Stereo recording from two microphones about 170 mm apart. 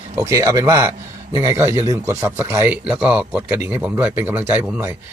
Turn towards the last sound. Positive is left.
turn(degrees=-10)  # may be behind; listen again after turning